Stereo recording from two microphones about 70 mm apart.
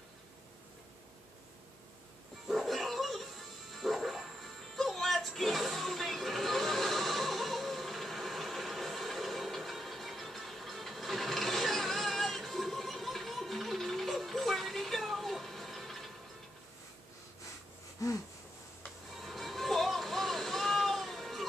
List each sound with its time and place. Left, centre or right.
2.4 s music: centre
19.1 s vehicle: centre